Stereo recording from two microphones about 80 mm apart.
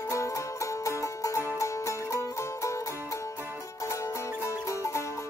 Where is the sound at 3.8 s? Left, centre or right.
Left.